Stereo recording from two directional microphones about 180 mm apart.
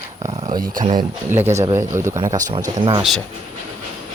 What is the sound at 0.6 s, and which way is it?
Speech, 45° right (ahead or behind).